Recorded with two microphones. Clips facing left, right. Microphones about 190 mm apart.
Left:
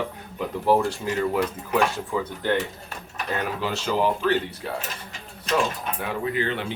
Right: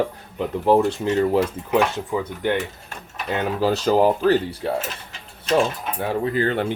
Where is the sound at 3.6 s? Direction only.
40° right (ahead or behind).